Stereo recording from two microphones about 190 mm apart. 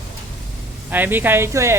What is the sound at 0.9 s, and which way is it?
Speech, 10° right (ahead or behind).